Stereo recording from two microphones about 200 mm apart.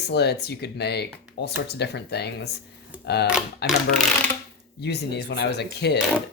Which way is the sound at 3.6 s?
55° left (ahead or behind).